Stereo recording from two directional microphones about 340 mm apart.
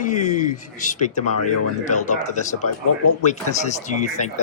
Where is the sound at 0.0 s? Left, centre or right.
Left.